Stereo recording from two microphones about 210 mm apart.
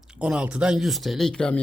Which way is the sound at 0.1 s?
5° right (ahead or behind).